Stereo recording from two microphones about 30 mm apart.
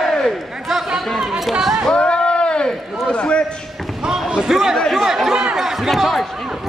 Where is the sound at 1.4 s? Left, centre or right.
Centre.